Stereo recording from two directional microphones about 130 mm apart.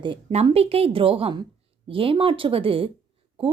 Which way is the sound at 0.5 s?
50° right (ahead or behind).